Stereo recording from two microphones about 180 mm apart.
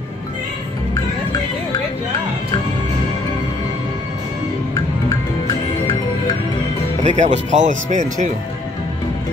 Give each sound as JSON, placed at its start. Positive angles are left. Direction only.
{"t": 7.0, "sound": "speech", "side_deg": -40}